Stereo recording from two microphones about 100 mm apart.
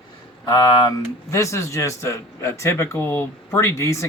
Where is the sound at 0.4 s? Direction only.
45° left (ahead or behind).